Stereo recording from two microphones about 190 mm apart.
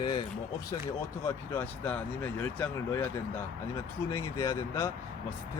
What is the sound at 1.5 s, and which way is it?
Speech, 10° left (ahead or behind).